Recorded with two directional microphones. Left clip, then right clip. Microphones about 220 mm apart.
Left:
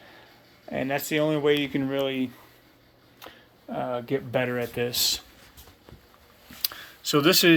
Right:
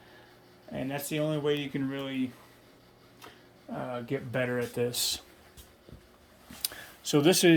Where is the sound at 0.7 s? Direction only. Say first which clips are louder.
Left 7 dB; 15° left (ahead or behind).